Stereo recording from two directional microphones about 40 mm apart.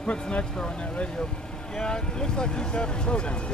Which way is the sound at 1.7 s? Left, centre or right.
Centre.